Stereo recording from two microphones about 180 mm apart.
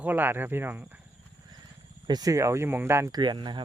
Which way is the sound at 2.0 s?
20° right (ahead or behind).